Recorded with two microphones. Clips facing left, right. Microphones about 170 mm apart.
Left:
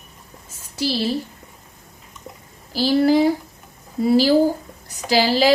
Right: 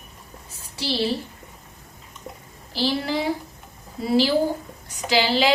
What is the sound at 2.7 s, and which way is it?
A woman's voice, 40° left (ahead or behind).